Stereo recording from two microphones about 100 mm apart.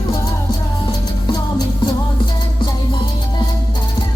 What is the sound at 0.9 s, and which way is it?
Music, 45° left (ahead or behind).